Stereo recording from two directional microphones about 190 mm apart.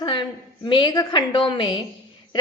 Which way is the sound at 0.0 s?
25° left (ahead or behind).